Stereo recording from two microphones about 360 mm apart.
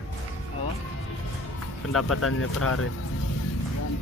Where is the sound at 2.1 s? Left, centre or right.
Left.